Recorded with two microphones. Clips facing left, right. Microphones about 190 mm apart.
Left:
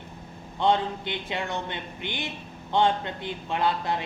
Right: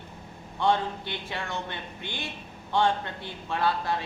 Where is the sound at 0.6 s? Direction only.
20° left (ahead or behind).